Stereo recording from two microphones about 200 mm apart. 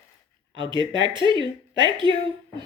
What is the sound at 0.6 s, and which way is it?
Speech, 25° right (ahead or behind).